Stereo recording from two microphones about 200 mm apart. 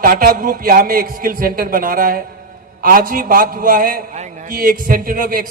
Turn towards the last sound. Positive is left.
turn(degrees=-45)  # may be behind; listen again after turning